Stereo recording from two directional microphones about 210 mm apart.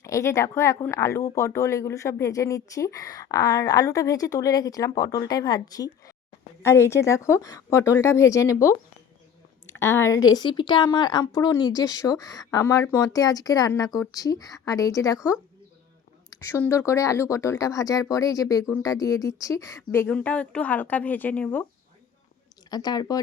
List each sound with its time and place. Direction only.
0.0 s a woman's voice: 15° left (ahead or behind)
16.4 s speech: 10° left (ahead or behind)
22.7 s a woman's voice: 20° left (ahead or behind)